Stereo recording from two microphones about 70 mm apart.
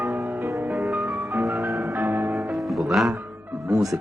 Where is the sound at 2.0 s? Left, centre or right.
Right.